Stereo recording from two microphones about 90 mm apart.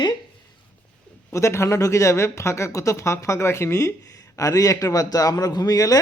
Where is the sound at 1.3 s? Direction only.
35° left (ahead or behind).